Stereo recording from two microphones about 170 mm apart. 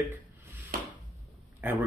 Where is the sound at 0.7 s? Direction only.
55° right (ahead or behind).